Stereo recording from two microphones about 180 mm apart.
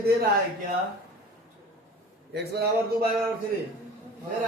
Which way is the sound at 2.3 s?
65° right (ahead or behind).